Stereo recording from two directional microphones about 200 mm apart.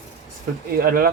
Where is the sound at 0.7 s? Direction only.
45° right (ahead or behind).